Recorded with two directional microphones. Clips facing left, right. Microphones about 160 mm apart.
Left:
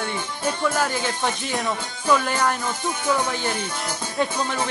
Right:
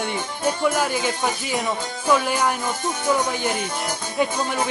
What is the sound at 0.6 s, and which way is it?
Speech, 10° right (ahead or behind).